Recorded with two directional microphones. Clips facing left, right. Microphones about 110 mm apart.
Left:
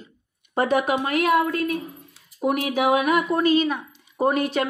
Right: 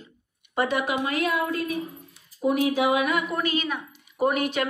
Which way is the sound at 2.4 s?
60° left (ahead or behind).